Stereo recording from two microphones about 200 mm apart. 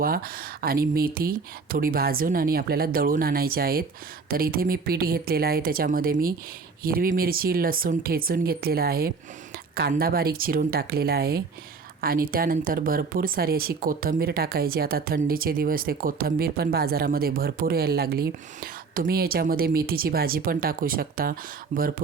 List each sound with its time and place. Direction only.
0.0 s speech: 45° right (ahead or behind)